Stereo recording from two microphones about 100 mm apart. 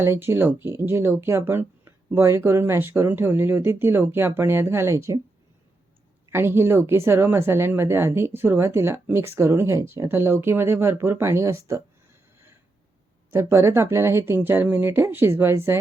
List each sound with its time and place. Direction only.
0.0 s a woman's voice: 25° right (ahead or behind)
6.3 s a woman's voice: 25° right (ahead or behind)
13.3 s a woman's voice: 30° right (ahead or behind)